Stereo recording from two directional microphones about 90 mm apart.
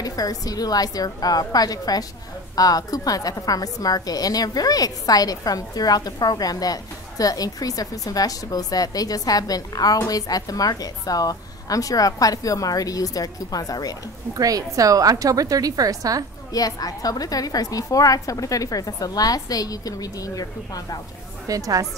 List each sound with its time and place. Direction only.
0.0 s a woman's voice: 45° left (ahead or behind)
14.3 s a woman's voice: 40° right (ahead or behind)
16.5 s a woman's voice: 45° left (ahead or behind)
21.5 s a woman's voice: 40° right (ahead or behind)